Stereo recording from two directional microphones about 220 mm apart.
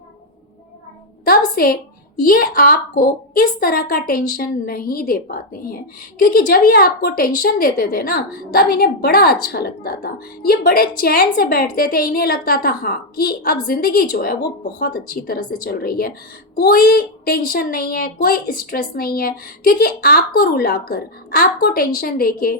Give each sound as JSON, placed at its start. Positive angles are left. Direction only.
{"t": 1.6, "sound": "a woman's voice", "side_deg": 40}